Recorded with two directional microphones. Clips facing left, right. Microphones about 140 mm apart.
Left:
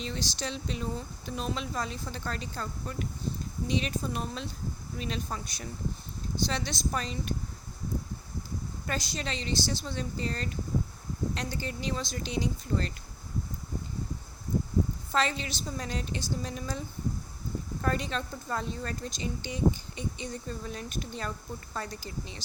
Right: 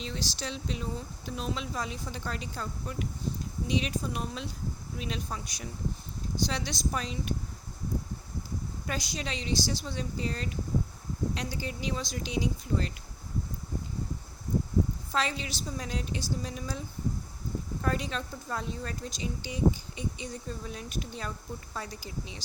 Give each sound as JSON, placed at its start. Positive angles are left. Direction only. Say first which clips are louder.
{"t": 0.0, "sound": "speech", "louder": "left 1 dB", "side_deg": -5}
{"t": 8.9, "sound": "speech", "louder": "left 1 dB", "side_deg": -10}
{"t": 15.1, "sound": "speech", "louder": "left 3 dB", "side_deg": -5}
{"t": 17.8, "sound": "speech", "louder": "left 1 dB", "side_deg": -5}